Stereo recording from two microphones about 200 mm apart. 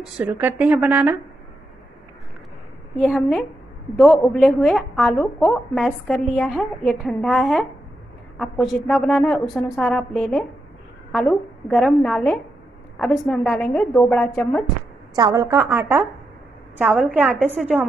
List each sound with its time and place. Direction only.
0.2 s a woman's voice: 10° right (ahead or behind)
3.2 s a woman's voice: centre (ahead or behind)
15.1 s a woman's voice: 20° right (ahead or behind)